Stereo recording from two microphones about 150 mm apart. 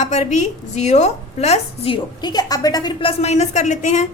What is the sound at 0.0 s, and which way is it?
A woman's voice, 50° left (ahead or behind).